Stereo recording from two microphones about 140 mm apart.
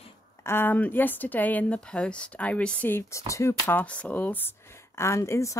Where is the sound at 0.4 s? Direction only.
15° left (ahead or behind).